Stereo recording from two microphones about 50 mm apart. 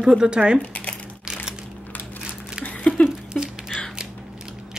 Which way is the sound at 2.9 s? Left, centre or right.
Left.